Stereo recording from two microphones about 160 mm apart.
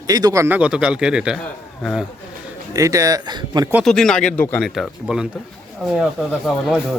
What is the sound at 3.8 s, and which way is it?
Speech, 5° left (ahead or behind).